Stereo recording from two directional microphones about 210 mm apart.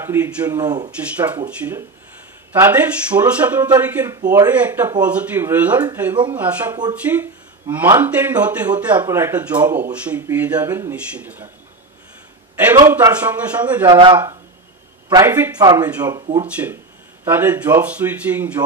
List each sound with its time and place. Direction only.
0.0 s speech: 10° right (ahead or behind)
3.1 s speech: 25° right (ahead or behind)
3.4 s speech: 10° right (ahead or behind)
12.6 s speech: 10° right (ahead or behind)
13.8 s speech: 20° right (ahead or behind)